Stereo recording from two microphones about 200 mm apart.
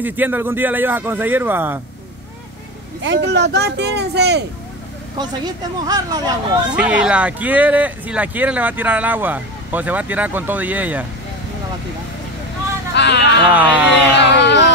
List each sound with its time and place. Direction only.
0.0 s speech: 10° right (ahead or behind)
3.0 s speech: 65° right (ahead or behind)
5.1 s speech: 20° right (ahead or behind)
6.7 s speech: 5° right (ahead or behind)
12.9 s speech: 60° left (ahead or behind)
13.5 s speech: 10° right (ahead or behind)
14.1 s speech: 60° left (ahead or behind)